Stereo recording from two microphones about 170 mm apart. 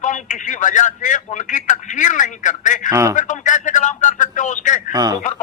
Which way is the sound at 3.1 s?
50° left (ahead or behind).